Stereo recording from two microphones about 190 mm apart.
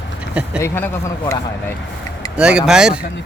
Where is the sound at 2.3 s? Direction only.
5° right (ahead or behind).